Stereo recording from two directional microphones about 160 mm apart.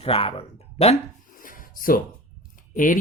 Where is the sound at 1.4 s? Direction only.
60° left (ahead or behind).